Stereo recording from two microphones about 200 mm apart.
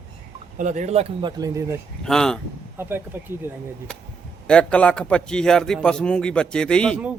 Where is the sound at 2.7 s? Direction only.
10° right (ahead or behind).